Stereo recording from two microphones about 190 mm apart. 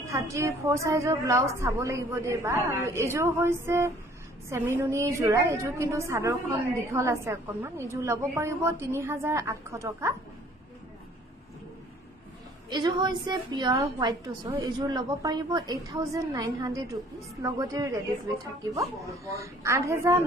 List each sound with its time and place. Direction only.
0.0 s a woman's voice: 15° right (ahead or behind)
12.6 s a woman's voice: 25° right (ahead or behind)